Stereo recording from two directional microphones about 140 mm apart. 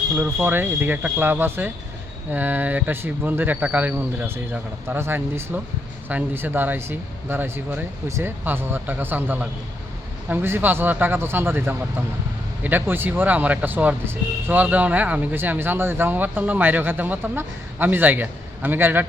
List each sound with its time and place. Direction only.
0.2 s speech: 15° right (ahead or behind)